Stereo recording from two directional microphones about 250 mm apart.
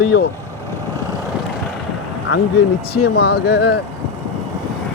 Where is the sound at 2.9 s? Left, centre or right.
Left.